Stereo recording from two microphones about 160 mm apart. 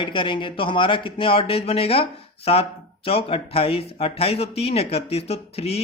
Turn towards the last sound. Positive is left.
turn(degrees=40)  # may be behind; listen again after turning